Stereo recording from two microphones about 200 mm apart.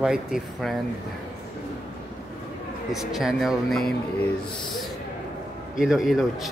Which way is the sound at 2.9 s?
Centre (ahead or behind).